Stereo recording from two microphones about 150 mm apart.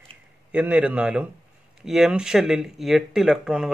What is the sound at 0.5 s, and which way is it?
Speech, 10° right (ahead or behind).